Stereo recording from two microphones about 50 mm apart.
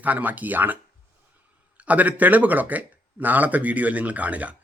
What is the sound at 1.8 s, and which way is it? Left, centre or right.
Speech, right.